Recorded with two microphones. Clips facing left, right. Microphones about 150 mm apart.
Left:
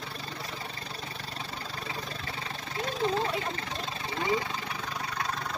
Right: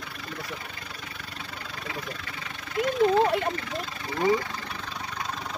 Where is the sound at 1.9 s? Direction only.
30° left (ahead or behind).